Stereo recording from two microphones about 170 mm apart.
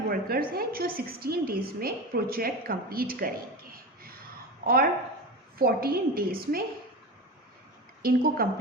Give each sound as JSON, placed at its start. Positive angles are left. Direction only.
{"t": 0.1, "sound": "a woman's voice", "side_deg": -60}
{"t": 8.0, "sound": "a woman's voice", "side_deg": -60}